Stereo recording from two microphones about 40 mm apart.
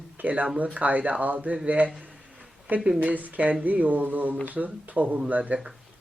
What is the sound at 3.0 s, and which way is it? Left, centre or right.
Speech, right.